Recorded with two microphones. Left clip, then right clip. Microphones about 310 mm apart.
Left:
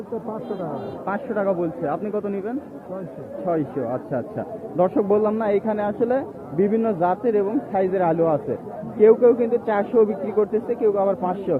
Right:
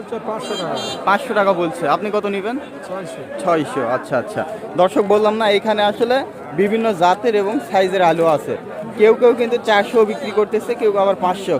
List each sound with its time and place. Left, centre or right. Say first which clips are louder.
1.0 s a man's voice: right 8 dB; centre
4.1 s a man's voice: right 7 dB; centre